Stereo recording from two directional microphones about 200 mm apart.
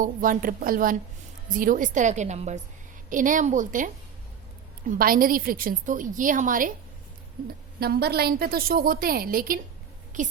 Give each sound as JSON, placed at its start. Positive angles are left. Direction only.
{"t": 0.0, "sound": "a woman's voice", "side_deg": -45}
{"t": 4.9, "sound": "a woman's voice", "side_deg": -45}
{"t": 7.8, "sound": "a woman's voice", "side_deg": -50}